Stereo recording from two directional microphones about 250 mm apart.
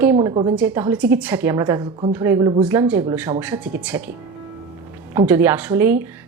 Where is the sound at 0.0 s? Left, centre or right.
Centre.